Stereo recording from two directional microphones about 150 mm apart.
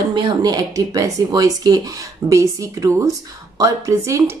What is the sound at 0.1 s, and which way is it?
Speech, 30° right (ahead or behind).